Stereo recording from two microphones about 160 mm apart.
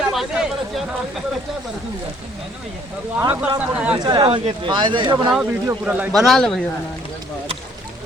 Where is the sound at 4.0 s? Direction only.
25° right (ahead or behind).